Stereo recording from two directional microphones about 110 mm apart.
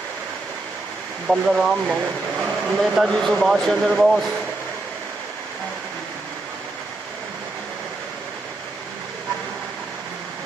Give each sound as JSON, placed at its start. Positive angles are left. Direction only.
{"t": 1.2, "sound": "speech", "side_deg": -5}